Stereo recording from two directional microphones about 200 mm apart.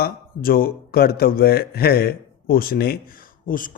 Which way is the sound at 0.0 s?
45° left (ahead or behind).